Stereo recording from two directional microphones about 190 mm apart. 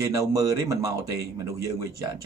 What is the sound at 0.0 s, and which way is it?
Speech, 15° right (ahead or behind).